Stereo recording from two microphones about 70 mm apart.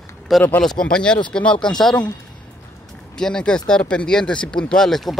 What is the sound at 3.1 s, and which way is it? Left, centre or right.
Speech, centre.